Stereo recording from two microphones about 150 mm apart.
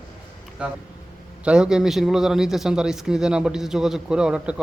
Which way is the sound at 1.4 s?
5° right (ahead or behind).